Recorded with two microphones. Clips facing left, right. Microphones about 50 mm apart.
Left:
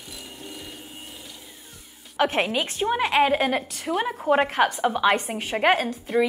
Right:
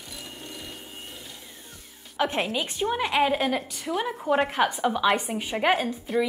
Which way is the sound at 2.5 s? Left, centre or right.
Left.